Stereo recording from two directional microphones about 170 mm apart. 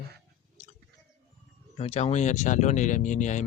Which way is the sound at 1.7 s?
35° left (ahead or behind).